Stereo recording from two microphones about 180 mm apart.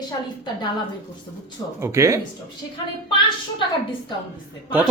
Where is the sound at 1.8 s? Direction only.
15° right (ahead or behind).